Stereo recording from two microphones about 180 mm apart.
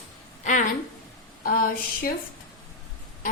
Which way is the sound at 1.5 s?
55° left (ahead or behind).